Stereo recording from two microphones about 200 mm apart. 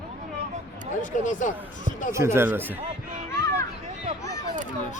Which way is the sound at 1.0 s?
40° left (ahead or behind).